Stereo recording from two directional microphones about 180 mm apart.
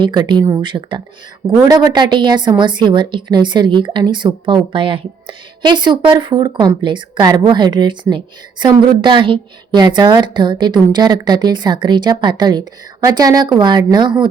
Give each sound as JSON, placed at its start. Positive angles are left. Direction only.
{"t": 0.0, "sound": "a woman's voice", "side_deg": -25}